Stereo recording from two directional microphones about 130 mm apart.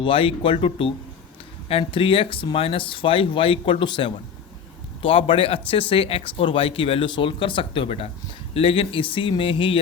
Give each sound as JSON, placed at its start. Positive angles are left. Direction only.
{"t": 0.0, "sound": "speech", "side_deg": 45}